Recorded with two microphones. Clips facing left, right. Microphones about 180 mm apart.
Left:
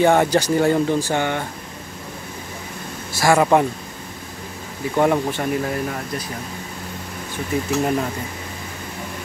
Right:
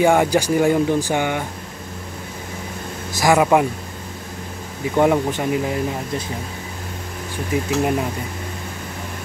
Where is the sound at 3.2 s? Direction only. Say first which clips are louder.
Even; 15° right (ahead or behind).